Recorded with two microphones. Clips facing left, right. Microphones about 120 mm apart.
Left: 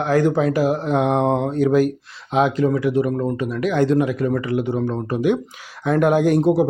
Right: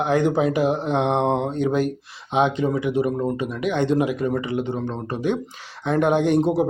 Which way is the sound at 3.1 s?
10° right (ahead or behind).